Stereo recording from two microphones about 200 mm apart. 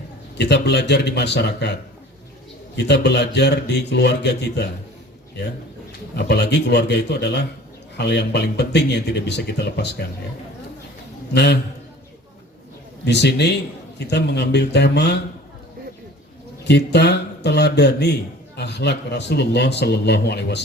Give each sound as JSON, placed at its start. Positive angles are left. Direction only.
{"t": 0.3, "sound": "a man's voice", "side_deg": 55}
{"t": 6.1, "sound": "a man's voice", "side_deg": 55}
{"t": 13.1, "sound": "a man's voice", "side_deg": 60}
{"t": 16.6, "sound": "a man's voice", "side_deg": 60}